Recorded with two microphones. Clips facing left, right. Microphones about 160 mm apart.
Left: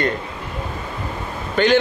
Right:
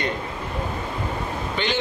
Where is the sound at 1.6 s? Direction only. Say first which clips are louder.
Left 10 dB; 45° left (ahead or behind).